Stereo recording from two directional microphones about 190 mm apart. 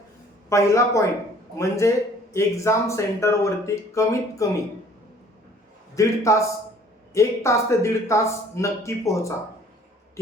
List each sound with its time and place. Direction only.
0.5 s speech: 15° left (ahead or behind)
5.9 s speech: 15° left (ahead or behind)